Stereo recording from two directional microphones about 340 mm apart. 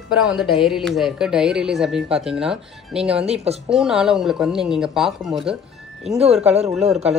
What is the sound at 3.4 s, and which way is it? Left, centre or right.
Speech, centre.